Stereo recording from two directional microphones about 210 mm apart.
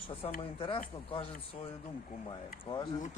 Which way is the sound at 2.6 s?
20° left (ahead or behind).